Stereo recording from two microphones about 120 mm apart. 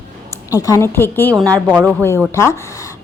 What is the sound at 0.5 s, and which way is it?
Speech, 30° left (ahead or behind).